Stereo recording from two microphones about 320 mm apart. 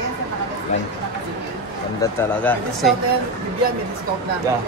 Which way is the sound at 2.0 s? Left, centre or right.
Centre.